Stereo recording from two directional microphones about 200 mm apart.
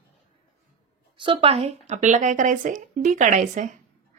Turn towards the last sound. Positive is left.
turn(degrees=-40)  # may be behind; listen again after turning